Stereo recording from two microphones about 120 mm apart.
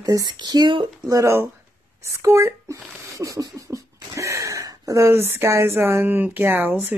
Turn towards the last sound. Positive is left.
turn(degrees=-15)  # may be behind; listen again after turning